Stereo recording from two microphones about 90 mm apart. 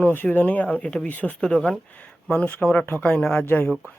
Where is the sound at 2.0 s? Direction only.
10° left (ahead or behind).